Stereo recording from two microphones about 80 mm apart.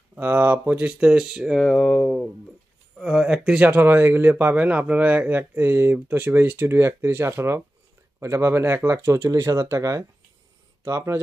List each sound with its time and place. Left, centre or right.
0.1 s speech: right
0.7 s speech: centre
1.6 s speech: centre
3.0 s speech: centre; by 11.1 s right